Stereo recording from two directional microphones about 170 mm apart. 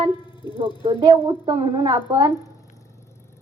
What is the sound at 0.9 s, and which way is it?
Speech, 30° right (ahead or behind).